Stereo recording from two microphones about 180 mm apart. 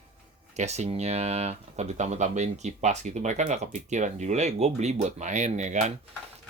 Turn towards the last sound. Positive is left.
turn(degrees=-40)  # may be behind; listen again after turning